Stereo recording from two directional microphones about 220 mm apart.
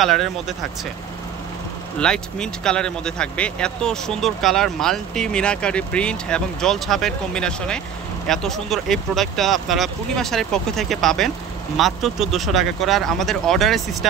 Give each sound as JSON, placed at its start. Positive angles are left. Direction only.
{"t": 0.0, "sound": "speech", "side_deg": 0}
{"t": 2.0, "sound": "speech", "side_deg": 5}